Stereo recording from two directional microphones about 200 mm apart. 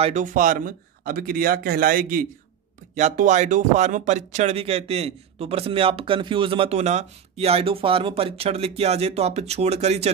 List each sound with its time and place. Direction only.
0.0 s speech: 40° right (ahead or behind)